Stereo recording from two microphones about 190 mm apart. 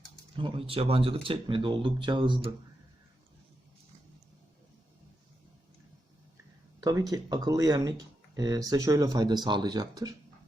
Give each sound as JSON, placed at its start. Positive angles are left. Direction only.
{"t": 0.4, "sound": "speech", "side_deg": -30}
{"t": 6.7, "sound": "speech", "side_deg": -20}